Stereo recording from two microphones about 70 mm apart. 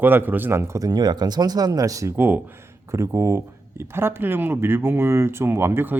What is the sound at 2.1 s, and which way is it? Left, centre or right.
Speech, right.